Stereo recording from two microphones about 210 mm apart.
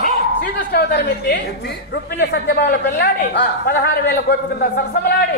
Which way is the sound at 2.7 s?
50° left (ahead or behind).